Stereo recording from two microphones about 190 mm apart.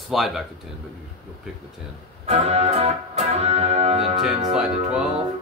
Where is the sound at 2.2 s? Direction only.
35° right (ahead or behind).